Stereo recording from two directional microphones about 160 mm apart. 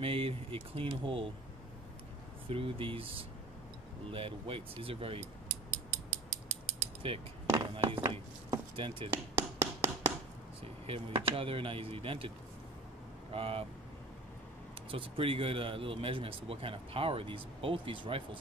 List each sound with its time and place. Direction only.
0.0 s speech: 35° right (ahead or behind)
2.5 s speech: 35° right (ahead or behind)
7.0 s speech: 35° right (ahead or behind)
9.1 s a sound: 15° right (ahead or behind)
10.9 s speech: 35° right (ahead or behind)
13.3 s speech: 35° right (ahead or behind)
14.9 s speech: 35° right (ahead or behind)